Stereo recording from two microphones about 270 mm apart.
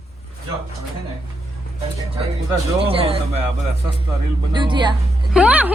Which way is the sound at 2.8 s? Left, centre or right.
Right.